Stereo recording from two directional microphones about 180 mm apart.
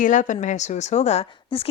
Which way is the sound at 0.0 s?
45° left (ahead or behind).